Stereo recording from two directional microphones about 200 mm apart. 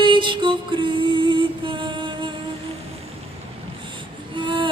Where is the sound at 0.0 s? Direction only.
25° right (ahead or behind).